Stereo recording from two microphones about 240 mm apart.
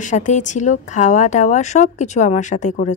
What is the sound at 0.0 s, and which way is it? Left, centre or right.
A woman's voice, left.